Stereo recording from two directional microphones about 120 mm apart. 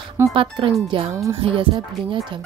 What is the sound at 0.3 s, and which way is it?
Speech, 45° right (ahead or behind).